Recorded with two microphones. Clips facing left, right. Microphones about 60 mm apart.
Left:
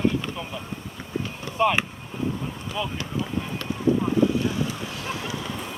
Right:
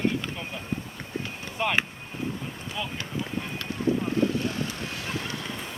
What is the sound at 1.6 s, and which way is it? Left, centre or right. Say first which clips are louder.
Speech: left 5 dB; centre.